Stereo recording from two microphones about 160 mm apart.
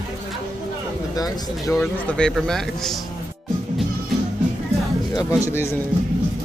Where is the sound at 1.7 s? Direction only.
5° left (ahead or behind).